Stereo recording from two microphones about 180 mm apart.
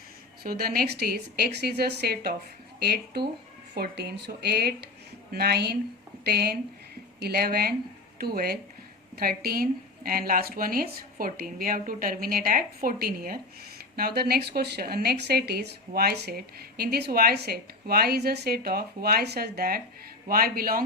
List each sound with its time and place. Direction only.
0.4 s a woman's voice: 55° right (ahead or behind)